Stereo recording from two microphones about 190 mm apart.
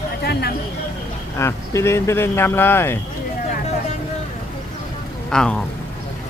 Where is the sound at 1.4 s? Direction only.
15° left (ahead or behind).